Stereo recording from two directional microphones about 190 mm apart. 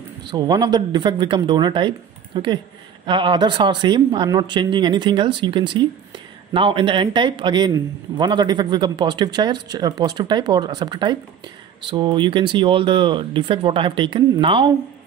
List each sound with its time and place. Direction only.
0.2 s speech: 20° right (ahead or behind)